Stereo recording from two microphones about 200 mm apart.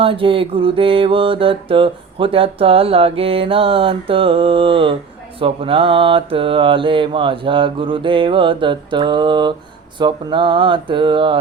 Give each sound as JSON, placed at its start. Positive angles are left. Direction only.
{"t": 0.0, "sound": "mantra", "side_deg": -25}